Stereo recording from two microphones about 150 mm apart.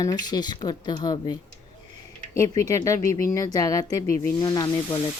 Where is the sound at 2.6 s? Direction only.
20° left (ahead or behind).